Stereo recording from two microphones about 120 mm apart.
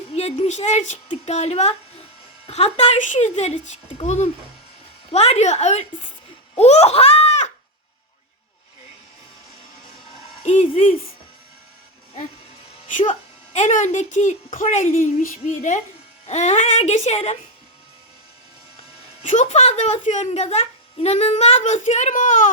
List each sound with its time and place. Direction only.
0.1 s speech: 60° left (ahead or behind)
1.2 s a child's voice: 65° left (ahead or behind)
6.6 s a sound: 60° left (ahead or behind)
10.4 s a child's voice: 70° left (ahead or behind)
12.9 s speech: 90° left
16.2 s a child's voice: 70° left (ahead or behind)
19.2 s a child's voice: 85° left